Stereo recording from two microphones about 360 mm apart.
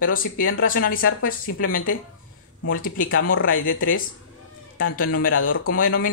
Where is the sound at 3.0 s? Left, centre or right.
Left.